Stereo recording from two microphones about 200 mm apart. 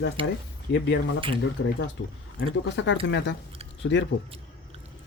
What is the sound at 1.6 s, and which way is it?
Speech, 65° left (ahead or behind).